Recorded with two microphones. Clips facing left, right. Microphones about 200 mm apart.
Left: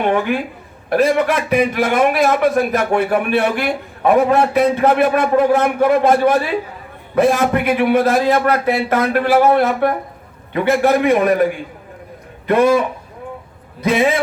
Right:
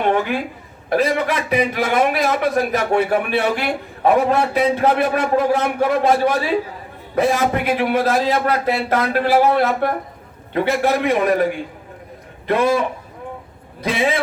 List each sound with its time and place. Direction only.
0.9 s a man's voice: 50° left (ahead or behind)
13.8 s a man's voice: 50° left (ahead or behind)